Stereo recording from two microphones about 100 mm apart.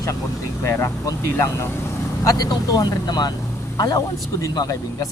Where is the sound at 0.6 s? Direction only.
30° left (ahead or behind).